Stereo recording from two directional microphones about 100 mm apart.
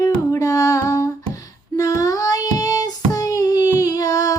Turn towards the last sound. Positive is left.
turn(degrees=35)  # may be behind; listen again after turning